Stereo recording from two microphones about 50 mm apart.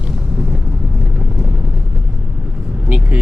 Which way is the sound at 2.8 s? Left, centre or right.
Right.